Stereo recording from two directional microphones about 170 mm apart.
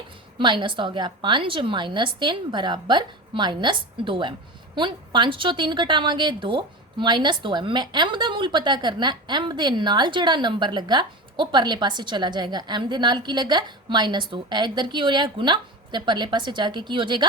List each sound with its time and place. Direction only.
0.3 s a woman's voice: 30° right (ahead or behind)